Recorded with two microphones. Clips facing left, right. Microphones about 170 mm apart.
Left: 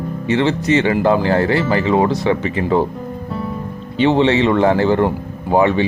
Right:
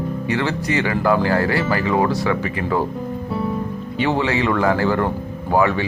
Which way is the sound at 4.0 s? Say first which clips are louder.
Left 6 dB; 25° left (ahead or behind).